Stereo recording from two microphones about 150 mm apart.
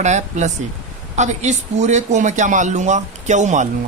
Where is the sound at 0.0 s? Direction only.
50° right (ahead or behind).